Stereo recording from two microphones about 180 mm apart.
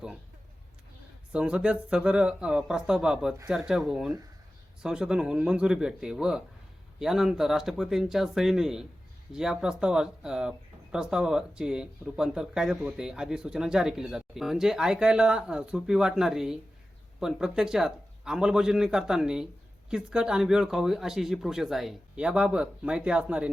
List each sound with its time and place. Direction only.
1.3 s speech: 5° right (ahead or behind)